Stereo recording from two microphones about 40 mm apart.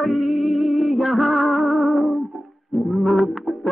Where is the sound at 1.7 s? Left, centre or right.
Centre.